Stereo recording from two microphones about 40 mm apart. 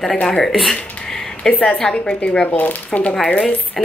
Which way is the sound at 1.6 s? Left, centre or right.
Centre.